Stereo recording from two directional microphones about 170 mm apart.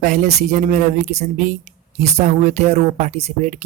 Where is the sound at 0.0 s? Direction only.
50° right (ahead or behind).